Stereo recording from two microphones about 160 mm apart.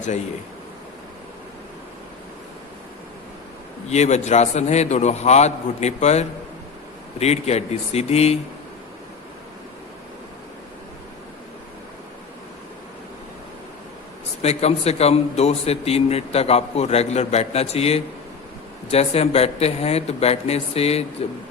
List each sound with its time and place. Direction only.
3.8 s a man's voice: 45° left (ahead or behind)
14.4 s a man's voice: 40° left (ahead or behind)